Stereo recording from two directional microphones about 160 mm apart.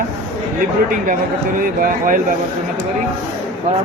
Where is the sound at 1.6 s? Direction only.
60° right (ahead or behind).